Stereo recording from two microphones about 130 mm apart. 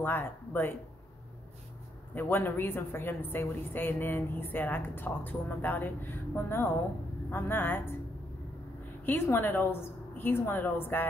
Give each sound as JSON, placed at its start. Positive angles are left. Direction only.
{"t": 0.0, "sound": "a woman's voice", "side_deg": 15}
{"t": 2.1, "sound": "a woman's voice", "side_deg": 15}
{"t": 9.0, "sound": "a woman's voice", "side_deg": 15}